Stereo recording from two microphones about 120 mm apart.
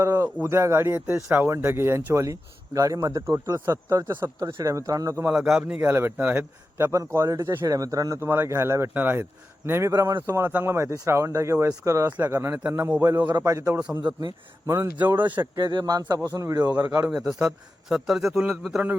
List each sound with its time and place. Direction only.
0.0 s a sound: 25° right (ahead or behind)
0.4 s speech: 20° right (ahead or behind)
5.3 s a man's voice: 5° right (ahead or behind)
5.8 s speech: 20° right (ahead or behind)
15.5 s speech: 40° right (ahead or behind)
17.1 s a man's voice: 5° right (ahead or behind)